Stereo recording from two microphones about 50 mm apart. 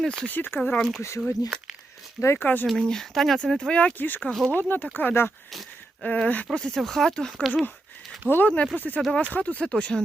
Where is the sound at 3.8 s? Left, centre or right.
Left.